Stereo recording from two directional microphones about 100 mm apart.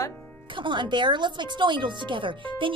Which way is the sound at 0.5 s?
55° right (ahead or behind).